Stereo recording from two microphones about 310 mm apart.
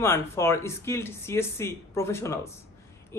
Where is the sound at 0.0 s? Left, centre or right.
Centre.